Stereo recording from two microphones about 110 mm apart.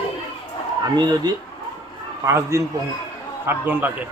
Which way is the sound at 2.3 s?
25° right (ahead or behind).